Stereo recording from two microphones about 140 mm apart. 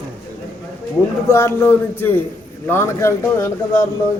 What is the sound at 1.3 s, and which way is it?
A man's voice, 20° left (ahead or behind).